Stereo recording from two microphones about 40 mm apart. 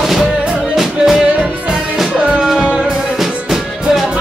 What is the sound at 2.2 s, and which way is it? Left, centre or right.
Music, right.